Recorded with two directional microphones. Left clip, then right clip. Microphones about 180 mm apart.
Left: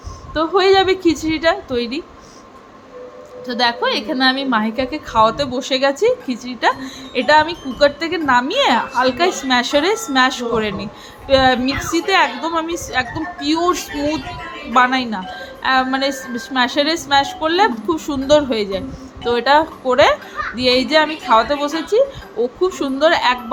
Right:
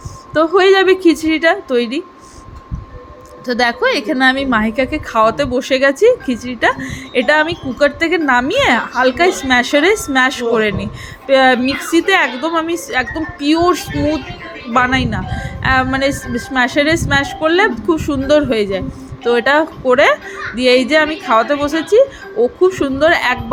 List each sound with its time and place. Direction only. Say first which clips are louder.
0.3 s a woman's voice: right 3 dB; 25° right (ahead or behind)
3.4 s a woman's voice: right 3 dB; 20° right (ahead or behind)